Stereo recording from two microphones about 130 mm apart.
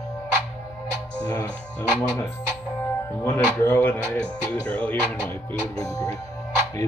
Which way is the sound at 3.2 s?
20° left (ahead or behind).